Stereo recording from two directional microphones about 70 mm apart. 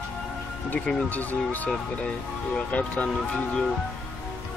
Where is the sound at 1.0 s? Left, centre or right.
Left.